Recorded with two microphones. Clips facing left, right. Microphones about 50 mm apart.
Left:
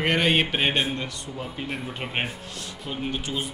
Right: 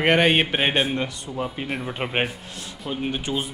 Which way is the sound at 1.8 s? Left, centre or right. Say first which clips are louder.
Right 7 dB; right.